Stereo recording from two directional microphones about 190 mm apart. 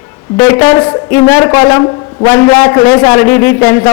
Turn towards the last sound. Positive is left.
turn(degrees=15)  # may be behind; listen again after turning